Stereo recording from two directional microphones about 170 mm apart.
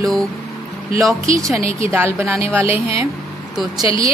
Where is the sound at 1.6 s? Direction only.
35° left (ahead or behind).